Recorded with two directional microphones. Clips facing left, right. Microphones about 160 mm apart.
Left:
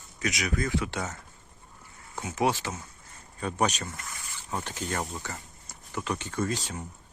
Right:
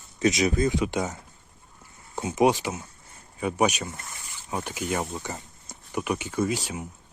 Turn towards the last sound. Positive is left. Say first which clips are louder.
# right 4 dB
turn(degrees=-10)  # may be behind; listen again after turning